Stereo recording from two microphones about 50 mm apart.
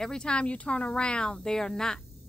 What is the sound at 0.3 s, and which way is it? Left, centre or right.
Speech, left.